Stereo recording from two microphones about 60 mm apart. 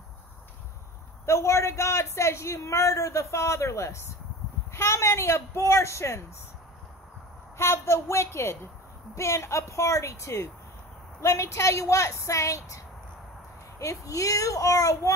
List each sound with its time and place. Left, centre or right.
1.2 s a man's voice: left
7.5 s a man's voice: left